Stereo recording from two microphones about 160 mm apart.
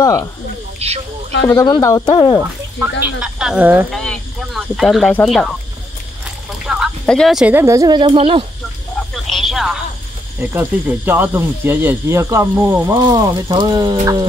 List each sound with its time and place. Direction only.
0.0 s speech: 20° left (ahead or behind)
0.7 s speech: 40° right (ahead or behind)
1.6 s speech: 20° left (ahead or behind)
3.0 s speech: 5° right (ahead or behind)
3.9 s speech: 5° left (ahead or behind)
6.7 s speech: centre (ahead or behind); by 8.5 s 35° right (ahead or behind)
9.1 s a sound: centre (ahead or behind)
10.5 s speech: 10° right (ahead or behind)